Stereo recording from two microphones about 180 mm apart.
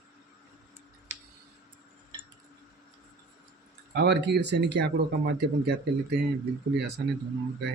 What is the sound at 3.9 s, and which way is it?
Speech, 70° right (ahead or behind).